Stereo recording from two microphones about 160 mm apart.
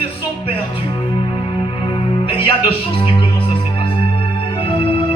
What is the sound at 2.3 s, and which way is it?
Music, 35° left (ahead or behind).